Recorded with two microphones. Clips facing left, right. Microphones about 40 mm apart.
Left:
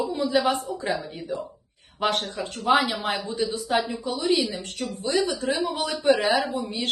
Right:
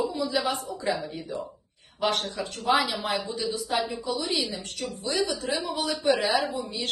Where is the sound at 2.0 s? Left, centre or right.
Left.